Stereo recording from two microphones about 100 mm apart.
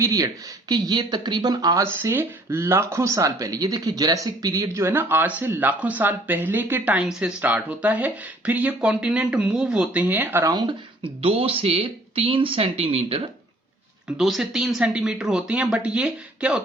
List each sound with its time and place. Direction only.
0.0 s speech: 35° right (ahead or behind)
0.7 s speech: 45° right (ahead or behind); by 10.4 s 20° right (ahead or behind)
10.4 s speech: 40° right (ahead or behind)
11.0 s speech: 70° right (ahead or behind)
14.2 s speech: centre (ahead or behind)